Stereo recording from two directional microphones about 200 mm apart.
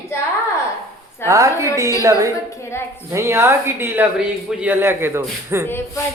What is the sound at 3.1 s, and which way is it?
Speech, 15° right (ahead or behind).